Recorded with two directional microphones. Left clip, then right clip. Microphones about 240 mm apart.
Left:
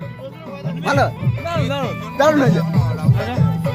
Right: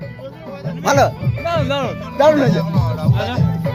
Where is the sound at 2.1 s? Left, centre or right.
Centre.